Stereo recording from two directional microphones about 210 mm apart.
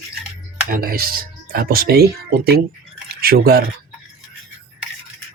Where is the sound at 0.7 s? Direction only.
45° right (ahead or behind).